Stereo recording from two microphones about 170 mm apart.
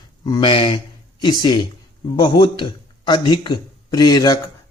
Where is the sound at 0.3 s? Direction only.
30° left (ahead or behind).